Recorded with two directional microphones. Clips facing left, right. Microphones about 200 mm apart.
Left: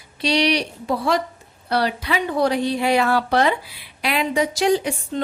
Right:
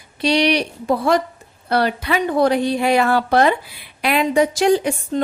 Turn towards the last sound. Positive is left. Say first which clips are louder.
# right 3 dB
turn(degrees=-50)  # may be behind; listen again after turning